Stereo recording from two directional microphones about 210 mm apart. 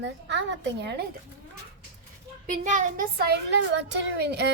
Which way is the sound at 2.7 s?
40° right (ahead or behind).